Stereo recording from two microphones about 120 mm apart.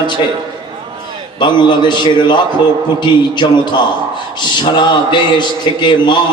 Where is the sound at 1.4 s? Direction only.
40° left (ahead or behind).